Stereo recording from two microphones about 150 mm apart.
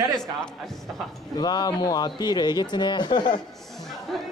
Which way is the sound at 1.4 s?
25° left (ahead or behind).